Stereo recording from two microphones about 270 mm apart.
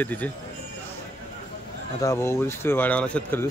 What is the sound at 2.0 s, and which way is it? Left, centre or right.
Speech, centre.